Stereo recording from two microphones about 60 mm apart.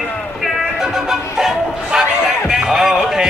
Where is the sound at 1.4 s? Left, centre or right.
Centre.